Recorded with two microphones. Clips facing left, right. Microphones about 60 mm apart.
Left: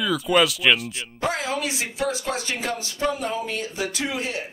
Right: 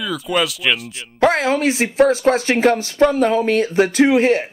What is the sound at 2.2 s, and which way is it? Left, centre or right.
Speech, right.